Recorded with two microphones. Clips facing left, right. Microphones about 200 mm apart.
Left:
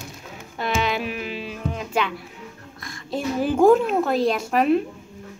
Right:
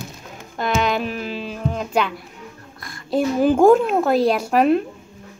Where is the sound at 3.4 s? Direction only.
45° right (ahead or behind).